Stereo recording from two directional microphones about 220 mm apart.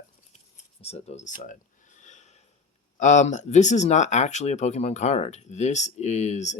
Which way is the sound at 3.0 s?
35° left (ahead or behind).